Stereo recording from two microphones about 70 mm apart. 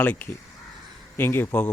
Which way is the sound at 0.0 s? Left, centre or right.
Left.